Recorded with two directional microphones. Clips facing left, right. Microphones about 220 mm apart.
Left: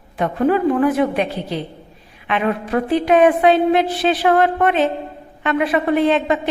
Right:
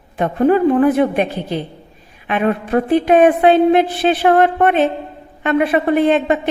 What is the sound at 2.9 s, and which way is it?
A woman's voice, 50° right (ahead or behind).